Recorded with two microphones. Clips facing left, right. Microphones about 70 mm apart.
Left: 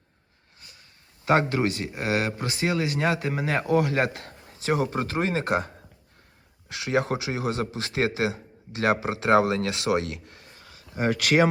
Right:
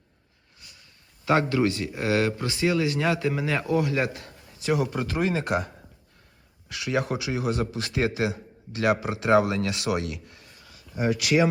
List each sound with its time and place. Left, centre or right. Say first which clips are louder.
1.2 s a man's voice: even; left